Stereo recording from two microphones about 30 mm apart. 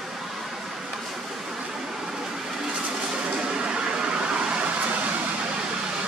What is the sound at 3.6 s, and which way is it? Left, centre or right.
Vehicle, right.